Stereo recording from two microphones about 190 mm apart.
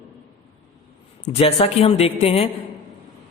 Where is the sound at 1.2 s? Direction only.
30° left (ahead or behind).